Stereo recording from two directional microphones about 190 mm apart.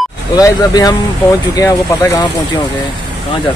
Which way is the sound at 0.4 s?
20° left (ahead or behind).